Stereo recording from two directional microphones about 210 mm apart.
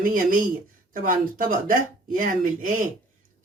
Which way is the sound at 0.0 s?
40° right (ahead or behind).